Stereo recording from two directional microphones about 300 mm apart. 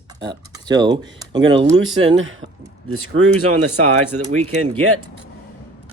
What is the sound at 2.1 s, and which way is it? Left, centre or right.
Speech, right.